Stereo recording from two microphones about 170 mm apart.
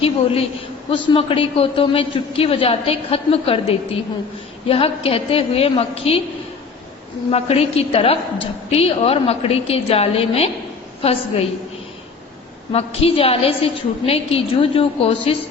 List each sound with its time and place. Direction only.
0.9 s a woman's voice: 30° left (ahead or behind)
7.3 s a woman's voice: 35° left (ahead or behind)
12.7 s a woman's voice: 35° left (ahead or behind)